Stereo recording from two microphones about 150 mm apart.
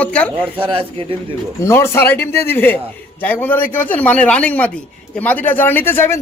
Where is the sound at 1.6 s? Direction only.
15° left (ahead or behind).